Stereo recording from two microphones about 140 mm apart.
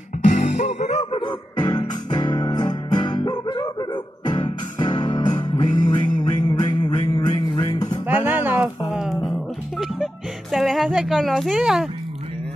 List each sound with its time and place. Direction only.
0.3 s music: 60° left (ahead or behind)
1.2 s music: 30° left (ahead or behind)
8.1 s a sound: 15° right (ahead or behind)
8.9 s a sound: centre (ahead or behind)
9.3 s music: centre (ahead or behind)
10.5 s speech: centre (ahead or behind)